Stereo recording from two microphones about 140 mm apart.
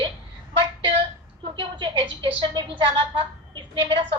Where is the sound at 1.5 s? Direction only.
35° right (ahead or behind).